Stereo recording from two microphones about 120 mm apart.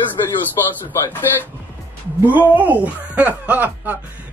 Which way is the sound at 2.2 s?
15° right (ahead or behind).